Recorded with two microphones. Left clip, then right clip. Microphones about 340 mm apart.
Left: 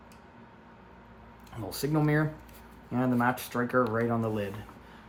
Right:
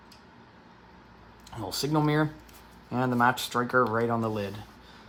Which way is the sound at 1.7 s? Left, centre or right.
Centre.